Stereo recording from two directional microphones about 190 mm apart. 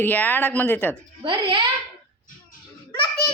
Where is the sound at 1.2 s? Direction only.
25° right (ahead or behind).